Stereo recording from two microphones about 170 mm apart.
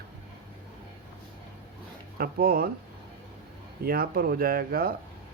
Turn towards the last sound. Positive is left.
turn(degrees=-60)  # may be behind; listen again after turning